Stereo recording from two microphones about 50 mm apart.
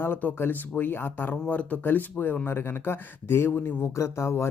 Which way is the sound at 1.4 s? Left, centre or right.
Left.